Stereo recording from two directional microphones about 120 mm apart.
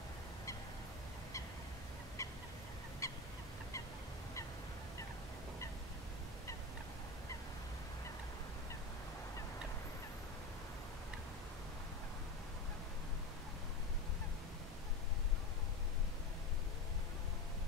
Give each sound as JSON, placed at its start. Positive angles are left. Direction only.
{"t": 2.2, "sound": "fowl", "side_deg": 25}
{"t": 3.0, "sound": "goose", "side_deg": 25}